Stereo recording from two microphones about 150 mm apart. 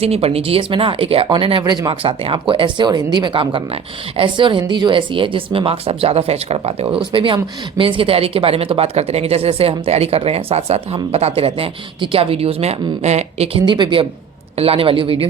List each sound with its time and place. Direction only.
0.0 s speech: 40° right (ahead or behind)